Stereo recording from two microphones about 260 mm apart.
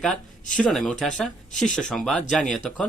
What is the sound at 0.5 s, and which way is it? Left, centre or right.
Speech, centre.